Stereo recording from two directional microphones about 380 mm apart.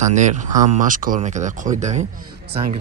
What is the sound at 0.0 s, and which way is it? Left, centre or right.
Speech, centre.